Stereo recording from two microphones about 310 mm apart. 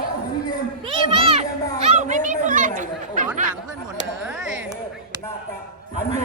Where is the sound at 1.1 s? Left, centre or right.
Centre.